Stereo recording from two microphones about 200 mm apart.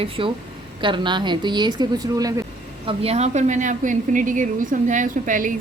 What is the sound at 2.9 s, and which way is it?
A woman's voice, 30° right (ahead or behind).